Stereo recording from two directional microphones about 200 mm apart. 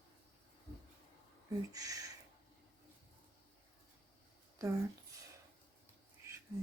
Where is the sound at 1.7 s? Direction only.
20° right (ahead or behind).